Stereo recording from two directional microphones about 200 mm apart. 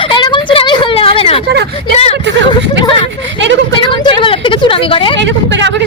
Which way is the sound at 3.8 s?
25° left (ahead or behind).